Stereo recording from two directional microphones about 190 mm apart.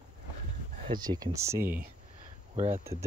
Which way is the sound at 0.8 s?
25° right (ahead or behind).